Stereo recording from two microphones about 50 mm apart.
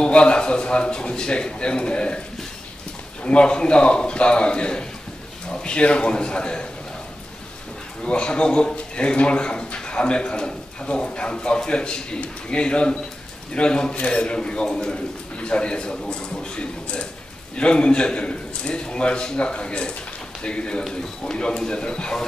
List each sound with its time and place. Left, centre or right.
0.0 s speech: centre
3.3 s speech: centre
8.0 s a man's voice: centre